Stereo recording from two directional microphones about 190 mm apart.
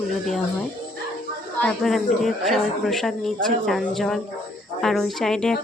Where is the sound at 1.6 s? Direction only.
Centre (ahead or behind).